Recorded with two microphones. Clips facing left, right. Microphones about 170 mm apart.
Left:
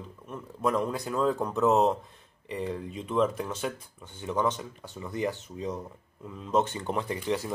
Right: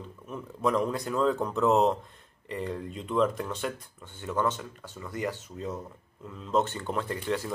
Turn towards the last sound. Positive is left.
turn(degrees=15)  # may be behind; listen again after turning